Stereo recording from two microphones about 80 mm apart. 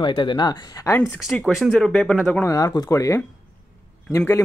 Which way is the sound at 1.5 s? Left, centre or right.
Centre.